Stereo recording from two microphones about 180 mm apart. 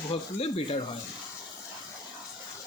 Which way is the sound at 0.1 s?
35° left (ahead or behind).